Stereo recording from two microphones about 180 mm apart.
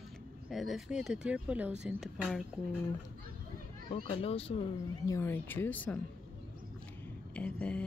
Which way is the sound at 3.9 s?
35° left (ahead or behind).